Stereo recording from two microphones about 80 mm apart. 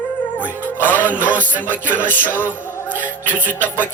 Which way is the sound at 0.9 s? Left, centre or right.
Left.